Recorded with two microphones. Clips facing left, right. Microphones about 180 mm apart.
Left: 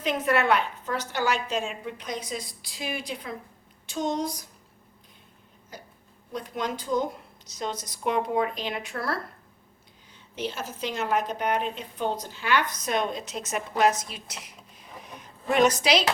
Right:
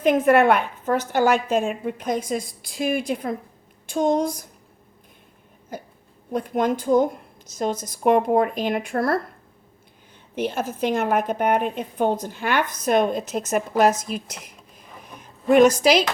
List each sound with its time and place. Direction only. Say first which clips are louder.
0.0 s a woman's voice: right 9 dB; 50° right (ahead or behind)
5.7 s a woman's voice: right 10 dB; 50° right (ahead or behind)
10.3 s a woman's voice: right 7 dB; 55° right (ahead or behind)
14.4 s a sound: right 3 dB; 50° right (ahead or behind)
15.4 s a woman's voice: right 7 dB; 50° right (ahead or behind)